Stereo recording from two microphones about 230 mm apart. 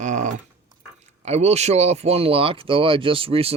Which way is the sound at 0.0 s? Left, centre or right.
Right.